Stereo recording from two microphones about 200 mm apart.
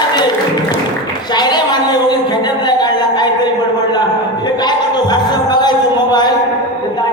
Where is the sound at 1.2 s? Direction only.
20° left (ahead or behind).